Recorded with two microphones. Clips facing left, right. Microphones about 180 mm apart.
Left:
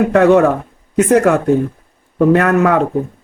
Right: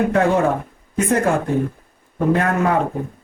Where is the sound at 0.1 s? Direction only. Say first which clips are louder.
Left 7 dB; 75° left (ahead or behind).